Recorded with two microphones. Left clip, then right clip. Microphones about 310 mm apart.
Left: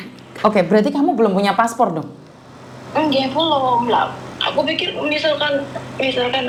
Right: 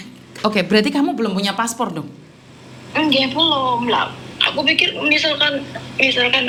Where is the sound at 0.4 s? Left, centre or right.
Centre.